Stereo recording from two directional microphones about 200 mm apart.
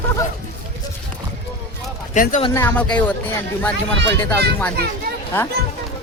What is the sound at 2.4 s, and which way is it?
Speech, 10° left (ahead or behind).